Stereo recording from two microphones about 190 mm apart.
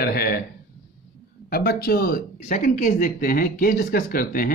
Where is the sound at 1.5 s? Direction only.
55° left (ahead or behind).